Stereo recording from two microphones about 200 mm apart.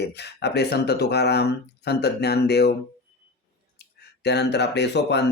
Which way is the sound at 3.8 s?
55° left (ahead or behind).